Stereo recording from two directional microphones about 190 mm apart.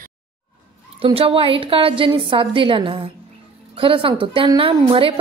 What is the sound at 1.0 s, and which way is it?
A woman's voice, 30° right (ahead or behind).